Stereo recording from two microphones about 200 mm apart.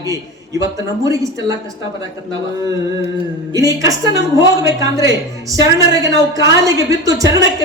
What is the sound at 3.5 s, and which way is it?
A man's voice, 15° right (ahead or behind).